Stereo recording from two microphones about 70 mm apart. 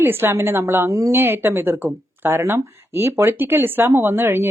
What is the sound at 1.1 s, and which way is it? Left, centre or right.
Speech, right.